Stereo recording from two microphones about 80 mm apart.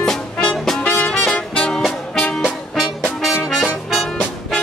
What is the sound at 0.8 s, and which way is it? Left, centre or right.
Music, centre.